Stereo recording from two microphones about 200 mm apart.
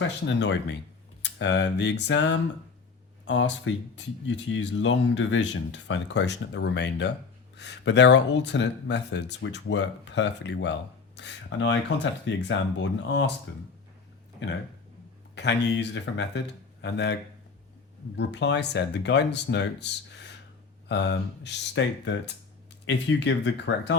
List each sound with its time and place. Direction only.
0.3 s speech: 60° left (ahead or behind)
15.4 s speech: 60° left (ahead or behind)
18.2 s speech: 60° left (ahead or behind)